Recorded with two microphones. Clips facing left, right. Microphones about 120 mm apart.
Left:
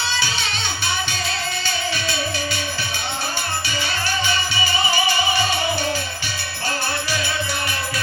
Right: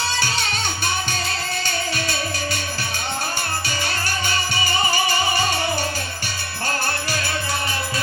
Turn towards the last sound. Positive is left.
turn(degrees=-45)  # may be behind; listen again after turning